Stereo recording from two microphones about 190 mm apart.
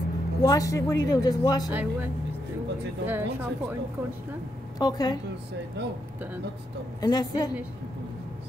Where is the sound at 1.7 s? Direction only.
10° right (ahead or behind).